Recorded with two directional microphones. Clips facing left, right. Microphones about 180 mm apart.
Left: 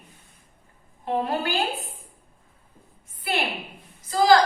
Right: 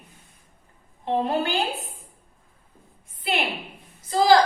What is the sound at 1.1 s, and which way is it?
Speech, 25° right (ahead or behind).